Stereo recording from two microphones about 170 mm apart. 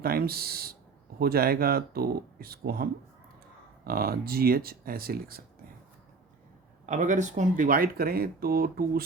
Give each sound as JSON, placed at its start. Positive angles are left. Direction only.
{"t": 0.0, "sound": "speech", "side_deg": -65}
{"t": 6.8, "sound": "speech", "side_deg": -45}